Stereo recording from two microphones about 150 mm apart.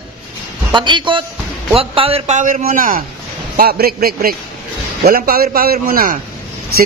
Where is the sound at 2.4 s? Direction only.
60° right (ahead or behind).